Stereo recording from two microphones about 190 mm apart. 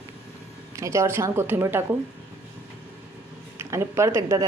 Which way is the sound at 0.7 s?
15° right (ahead or behind).